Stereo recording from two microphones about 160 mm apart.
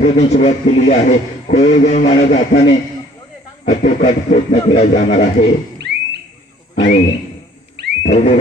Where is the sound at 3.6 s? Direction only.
50° left (ahead or behind).